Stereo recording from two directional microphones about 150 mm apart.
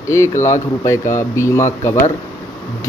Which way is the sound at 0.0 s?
20° left (ahead or behind).